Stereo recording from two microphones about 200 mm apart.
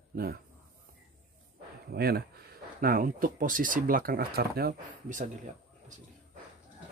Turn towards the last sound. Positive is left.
turn(degrees=-45)  # may be behind; listen again after turning